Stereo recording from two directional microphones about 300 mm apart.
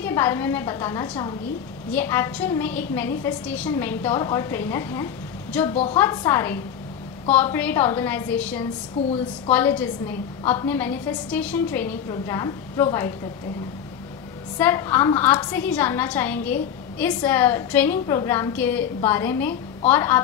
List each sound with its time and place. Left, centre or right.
0.0 s a woman's voice: centre
5.7 s a woman's voice: left
5.9 s a woman's voice: centre
14.6 s a woman's voice: centre